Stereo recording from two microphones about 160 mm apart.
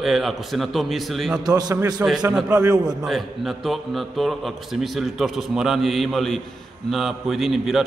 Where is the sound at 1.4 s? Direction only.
25° right (ahead or behind).